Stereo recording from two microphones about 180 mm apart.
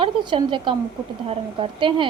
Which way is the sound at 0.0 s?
30° right (ahead or behind).